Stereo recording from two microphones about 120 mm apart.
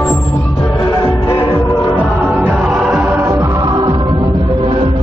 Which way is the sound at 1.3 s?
40° left (ahead or behind).